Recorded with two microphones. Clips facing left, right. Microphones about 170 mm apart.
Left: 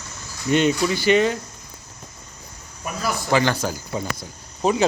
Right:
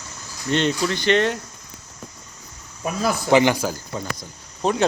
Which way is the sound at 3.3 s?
15° right (ahead or behind).